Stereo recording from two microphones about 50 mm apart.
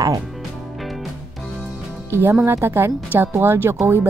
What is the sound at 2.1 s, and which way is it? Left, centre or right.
A woman's voice, right.